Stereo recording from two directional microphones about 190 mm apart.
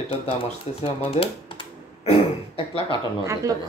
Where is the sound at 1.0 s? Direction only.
30° left (ahead or behind).